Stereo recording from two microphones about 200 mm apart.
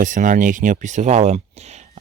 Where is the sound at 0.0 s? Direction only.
40° right (ahead or behind).